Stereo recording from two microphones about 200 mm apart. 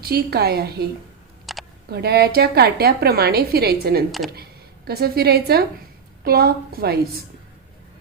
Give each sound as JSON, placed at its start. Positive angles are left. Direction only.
{"t": 0.0, "sound": "a woman's voice", "side_deg": -50}
{"t": 1.5, "sound": "a sound", "side_deg": 0}
{"t": 1.9, "sound": "a woman's voice", "side_deg": -50}